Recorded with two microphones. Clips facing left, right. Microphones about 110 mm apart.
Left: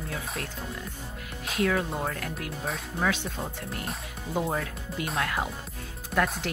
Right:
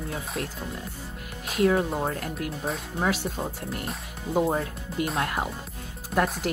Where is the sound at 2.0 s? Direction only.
30° right (ahead or behind).